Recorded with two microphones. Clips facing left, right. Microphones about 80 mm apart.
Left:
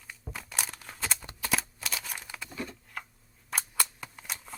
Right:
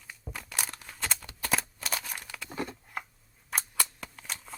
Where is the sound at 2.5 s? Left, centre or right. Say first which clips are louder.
Right 4 dB; right.